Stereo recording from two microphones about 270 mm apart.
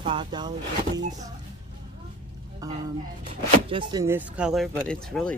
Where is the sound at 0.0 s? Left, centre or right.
Centre.